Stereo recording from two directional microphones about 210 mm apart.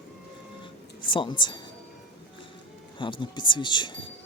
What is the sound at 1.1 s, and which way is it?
Speech, 25° left (ahead or behind).